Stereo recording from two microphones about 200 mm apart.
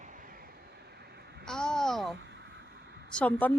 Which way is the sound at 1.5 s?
5° left (ahead or behind).